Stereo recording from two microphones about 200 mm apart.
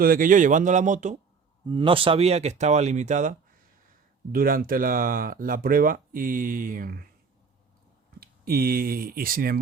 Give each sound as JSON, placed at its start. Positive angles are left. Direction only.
{"t": 0.0, "sound": "speech", "side_deg": -45}
{"t": 1.6, "sound": "speech", "side_deg": -25}
{"t": 8.2, "sound": "speech", "side_deg": -50}